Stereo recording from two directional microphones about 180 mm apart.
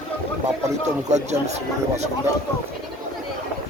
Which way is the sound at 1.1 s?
40° right (ahead or behind).